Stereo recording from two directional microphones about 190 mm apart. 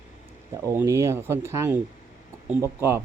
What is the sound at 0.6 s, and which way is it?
Speech, 15° right (ahead or behind).